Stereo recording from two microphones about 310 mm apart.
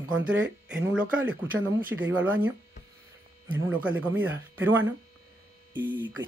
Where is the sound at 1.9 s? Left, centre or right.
Right.